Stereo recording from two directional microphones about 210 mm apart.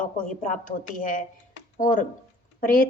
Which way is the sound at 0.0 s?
35° left (ahead or behind).